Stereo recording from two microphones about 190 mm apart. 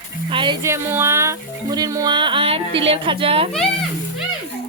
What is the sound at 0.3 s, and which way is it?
Music, 25° right (ahead or behind).